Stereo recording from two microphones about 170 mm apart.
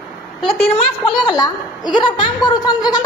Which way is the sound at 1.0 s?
25° left (ahead or behind).